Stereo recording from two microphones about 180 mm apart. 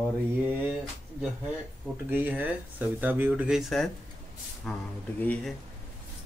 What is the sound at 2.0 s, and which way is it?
Speech, 10° right (ahead or behind).